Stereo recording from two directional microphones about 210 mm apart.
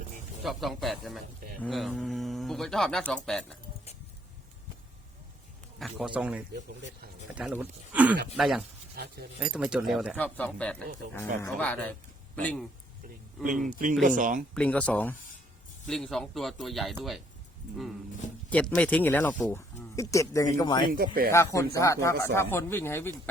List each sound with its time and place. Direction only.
0.4 s speech: centre (ahead or behind)
5.8 s speech: centre (ahead or behind)
10.2 s speech: 5° left (ahead or behind)
13.4 s speech: 40° right (ahead or behind)
14.5 s speech: 5° left (ahead or behind)
18.8 s speech: 5° left (ahead or behind)
20.9 s speech: 45° right (ahead or behind)
21.3 s speech: 15° left (ahead or behind)